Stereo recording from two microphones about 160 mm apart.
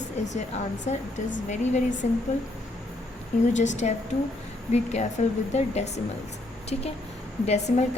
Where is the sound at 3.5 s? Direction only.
50° left (ahead or behind).